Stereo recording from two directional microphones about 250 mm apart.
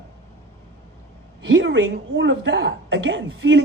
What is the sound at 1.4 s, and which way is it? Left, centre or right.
A woman's voice, right.